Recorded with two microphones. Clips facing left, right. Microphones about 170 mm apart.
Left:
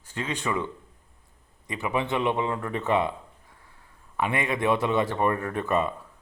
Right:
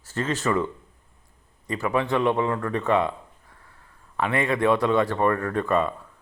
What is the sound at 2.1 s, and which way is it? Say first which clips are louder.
Speech: right 4 dB; 20° left (ahead or behind).